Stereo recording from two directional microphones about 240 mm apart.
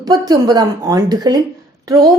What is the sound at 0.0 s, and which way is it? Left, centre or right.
A woman's voice, centre.